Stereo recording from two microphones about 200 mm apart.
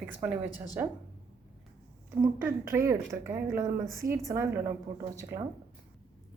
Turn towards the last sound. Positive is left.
turn(degrees=-15)  # may be behind; listen again after turning